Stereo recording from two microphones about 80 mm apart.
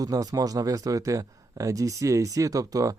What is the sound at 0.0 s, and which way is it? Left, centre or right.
Speech, right.